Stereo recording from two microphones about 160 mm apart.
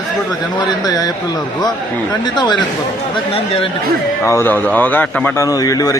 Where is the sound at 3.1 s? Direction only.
35° left (ahead or behind).